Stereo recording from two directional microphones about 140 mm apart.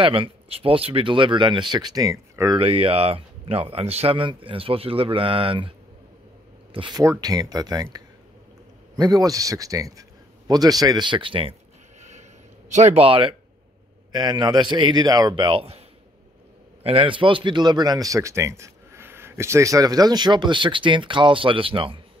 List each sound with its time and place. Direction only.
0.0 s speech: 40° right (ahead or behind); by 2.6 s 25° right (ahead or behind)
2.6 s speech: 40° right (ahead or behind)
6.7 s speech: 35° right (ahead or behind)
12.0 s a sound: 55° right (ahead or behind)
12.7 s speech: 50° right (ahead or behind)
14.1 s speech: 30° right (ahead or behind)
16.8 s speech: 40° right (ahead or behind)